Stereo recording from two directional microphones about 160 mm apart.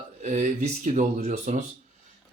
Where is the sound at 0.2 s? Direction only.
45° right (ahead or behind).